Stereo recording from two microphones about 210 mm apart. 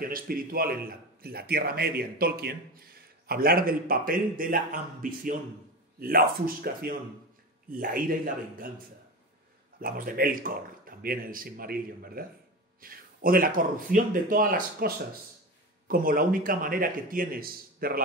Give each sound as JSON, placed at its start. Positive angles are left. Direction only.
{"t": 0.0, "sound": "a man's voice", "side_deg": -45}
{"t": 9.8, "sound": "a man's voice", "side_deg": -45}
{"t": 15.9, "sound": "a man's voice", "side_deg": -40}